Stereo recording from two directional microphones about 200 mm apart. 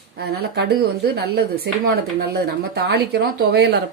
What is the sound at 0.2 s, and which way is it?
Speech, 50° right (ahead or behind).